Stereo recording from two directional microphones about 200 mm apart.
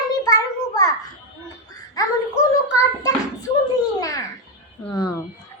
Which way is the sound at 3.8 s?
20° left (ahead or behind).